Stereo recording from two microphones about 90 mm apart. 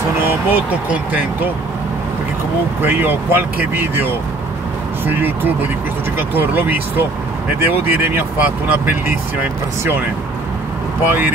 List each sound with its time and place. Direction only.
0.2 s speech: 25° right (ahead or behind)
2.8 s speech: 25° right (ahead or behind)
11.1 s speech: 20° right (ahead or behind)